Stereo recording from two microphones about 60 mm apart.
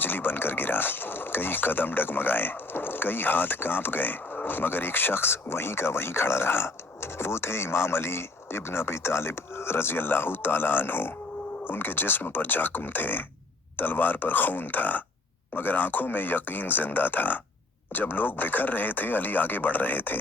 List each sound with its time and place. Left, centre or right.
0.0 s speech: left